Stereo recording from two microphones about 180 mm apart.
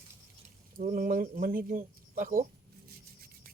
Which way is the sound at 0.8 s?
50° right (ahead or behind).